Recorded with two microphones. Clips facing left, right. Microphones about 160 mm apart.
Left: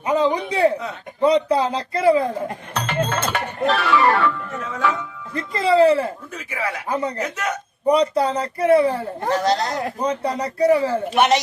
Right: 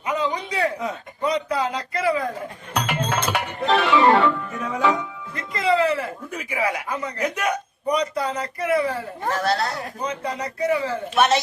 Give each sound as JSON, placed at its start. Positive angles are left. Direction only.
{"t": 0.0, "sound": "a man's voice", "side_deg": 30}
{"t": 2.7, "sound": "music", "side_deg": -10}
{"t": 3.7, "sound": "speech", "side_deg": -20}
{"t": 5.3, "sound": "speech", "side_deg": 30}
{"t": 6.3, "sound": "speech", "side_deg": -10}
{"t": 6.8, "sound": "speech", "side_deg": 30}
{"t": 7.2, "sound": "speech", "side_deg": -10}
{"t": 7.9, "sound": "speech", "side_deg": 30}
{"t": 9.2, "sound": "speech", "side_deg": 20}
{"t": 10.0, "sound": "speech", "side_deg": 35}
{"t": 11.1, "sound": "a woman's voice", "side_deg": 15}